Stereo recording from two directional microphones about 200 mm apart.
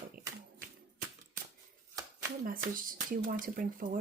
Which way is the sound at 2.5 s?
45° right (ahead or behind).